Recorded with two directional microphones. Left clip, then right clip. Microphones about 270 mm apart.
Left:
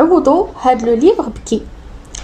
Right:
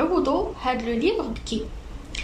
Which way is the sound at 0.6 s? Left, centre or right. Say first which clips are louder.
Left 13 dB; left.